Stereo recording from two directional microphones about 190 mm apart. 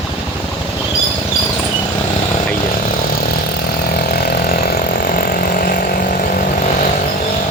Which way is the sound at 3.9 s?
55° left (ahead or behind).